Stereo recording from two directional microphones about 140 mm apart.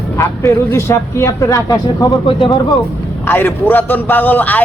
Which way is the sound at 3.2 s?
15° left (ahead or behind).